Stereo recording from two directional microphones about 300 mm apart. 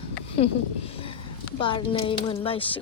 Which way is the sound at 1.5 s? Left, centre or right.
Centre.